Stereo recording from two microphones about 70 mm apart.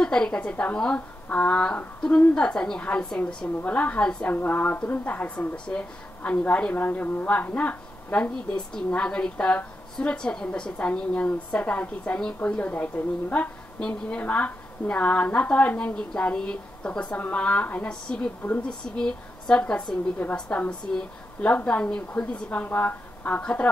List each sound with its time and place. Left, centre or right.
0.0 s a woman's voice: centre
4.3 s a woman's voice: left